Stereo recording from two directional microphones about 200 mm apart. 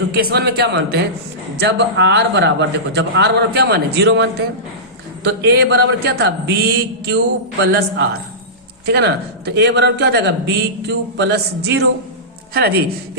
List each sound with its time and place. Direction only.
0.1 s a man's voice: 50° right (ahead or behind)